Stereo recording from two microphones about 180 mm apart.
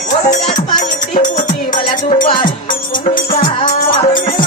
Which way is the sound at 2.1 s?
30° left (ahead or behind).